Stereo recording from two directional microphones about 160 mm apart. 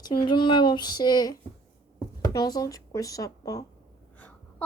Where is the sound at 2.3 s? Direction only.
25° left (ahead or behind).